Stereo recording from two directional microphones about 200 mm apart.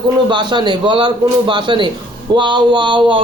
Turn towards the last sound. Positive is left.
turn(degrees=-25)  # may be behind; listen again after turning